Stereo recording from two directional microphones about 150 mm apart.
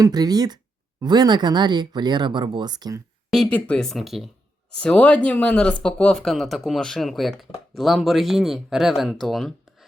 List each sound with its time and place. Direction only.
0.0 s speech: 25° right (ahead or behind)
3.2 s speech: 5° left (ahead or behind)